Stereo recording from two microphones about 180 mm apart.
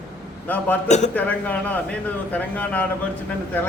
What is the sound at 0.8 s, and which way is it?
Speech, 40° left (ahead or behind).